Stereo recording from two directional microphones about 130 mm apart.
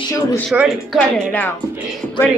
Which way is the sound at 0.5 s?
5° right (ahead or behind).